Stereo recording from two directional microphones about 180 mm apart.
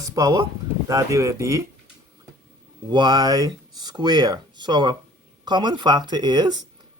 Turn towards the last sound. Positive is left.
turn(degrees=-25)  # may be behind; listen again after turning